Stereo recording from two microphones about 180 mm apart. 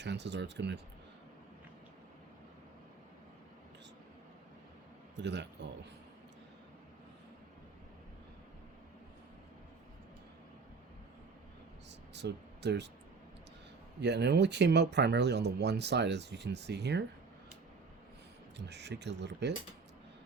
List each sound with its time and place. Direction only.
0.0 s speech: 75° right (ahead or behind)
5.1 s speech: 75° right (ahead or behind)
12.1 s a sound: 70° right (ahead or behind)
14.0 s speech: 70° right (ahead or behind)
18.5 s speech: 70° right (ahead or behind)